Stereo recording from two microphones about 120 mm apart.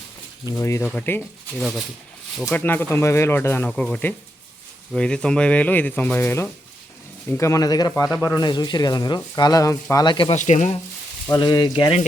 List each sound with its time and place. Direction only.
0.5 s speech: 25° left (ahead or behind)
1.5 s speech: 5° right (ahead or behind)
2.5 s speech: 15° left (ahead or behind)
3.7 s speech: 5° left (ahead or behind); by 10.3 s 40° left (ahead or behind)
10.3 s speech: 80° left
11.3 s speech: 40° left (ahead or behind)